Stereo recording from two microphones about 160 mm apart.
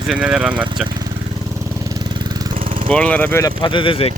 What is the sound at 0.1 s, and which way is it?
Speech, 10° right (ahead or behind).